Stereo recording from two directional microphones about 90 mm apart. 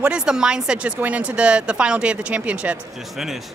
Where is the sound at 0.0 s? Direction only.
10° right (ahead or behind).